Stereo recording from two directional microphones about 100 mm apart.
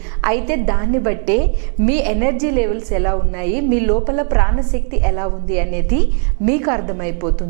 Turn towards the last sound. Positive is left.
turn(degrees=-15)  # may be behind; listen again after turning